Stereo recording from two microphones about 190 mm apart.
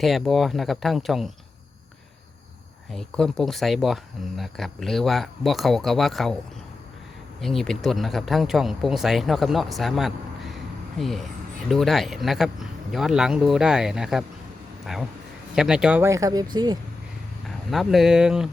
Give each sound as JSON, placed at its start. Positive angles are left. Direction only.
{"t": 0.0, "sound": "speech", "side_deg": 0}
{"t": 2.9, "sound": "speech", "side_deg": 0}
{"t": 7.4, "sound": "speech", "side_deg": 0}
{"t": 15.5, "sound": "speech", "side_deg": -5}
{"t": 17.7, "sound": "speech", "side_deg": 0}